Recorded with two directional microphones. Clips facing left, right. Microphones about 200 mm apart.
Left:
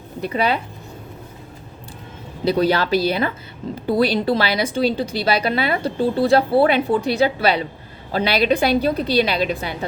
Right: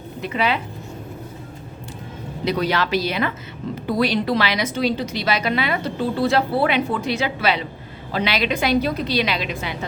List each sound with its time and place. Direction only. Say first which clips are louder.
0.3 s a woman's voice: left 2 dB; 40° left (ahead or behind)
2.4 s a woman's voice: left 4 dB; 30° left (ahead or behind)